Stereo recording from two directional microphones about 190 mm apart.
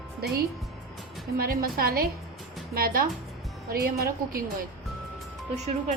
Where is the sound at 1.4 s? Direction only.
50° right (ahead or behind).